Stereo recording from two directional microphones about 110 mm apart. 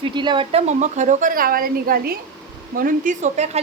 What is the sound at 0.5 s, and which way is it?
Speech, 90° right.